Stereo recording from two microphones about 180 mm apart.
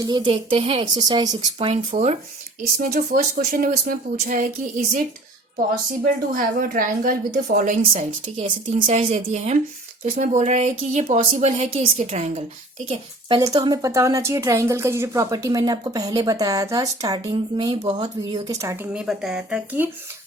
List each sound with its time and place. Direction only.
0.0 s a woman's voice: 25° right (ahead or behind)
2.7 s speech: 60° right (ahead or behind)
6.3 s speech: 50° right (ahead or behind)
8.4 s a woman's voice: 35° right (ahead or behind)
12.9 s a woman's voice: 25° right (ahead or behind)
18.9 s speech: 5° right (ahead or behind)